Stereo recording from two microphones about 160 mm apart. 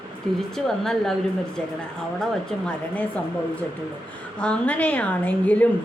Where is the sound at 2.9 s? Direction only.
10° left (ahead or behind).